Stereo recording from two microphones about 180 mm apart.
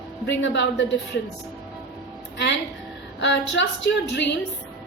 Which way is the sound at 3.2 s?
80° left.